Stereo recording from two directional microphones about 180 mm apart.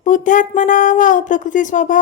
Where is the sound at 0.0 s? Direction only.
45° left (ahead or behind).